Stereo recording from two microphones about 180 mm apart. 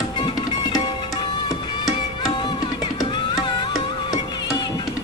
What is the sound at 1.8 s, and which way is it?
Music, 20° left (ahead or behind).